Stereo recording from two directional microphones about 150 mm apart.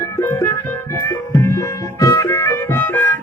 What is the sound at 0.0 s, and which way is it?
Music, 15° left (ahead or behind).